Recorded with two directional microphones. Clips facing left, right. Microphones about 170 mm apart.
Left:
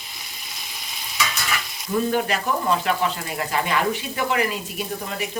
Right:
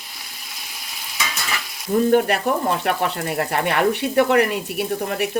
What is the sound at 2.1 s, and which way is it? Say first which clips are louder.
Speech: right 8 dB; 55° right (ahead or behind).